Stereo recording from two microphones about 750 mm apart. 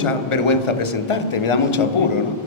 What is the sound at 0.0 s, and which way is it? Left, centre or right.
A man's voice, left.